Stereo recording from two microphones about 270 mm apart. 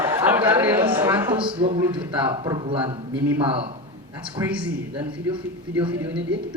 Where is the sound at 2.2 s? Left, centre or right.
Centre.